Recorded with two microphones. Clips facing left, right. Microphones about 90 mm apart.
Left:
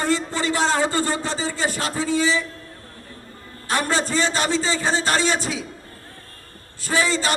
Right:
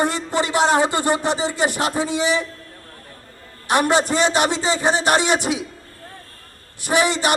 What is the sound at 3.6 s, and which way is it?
A man's voice, 20° right (ahead or behind).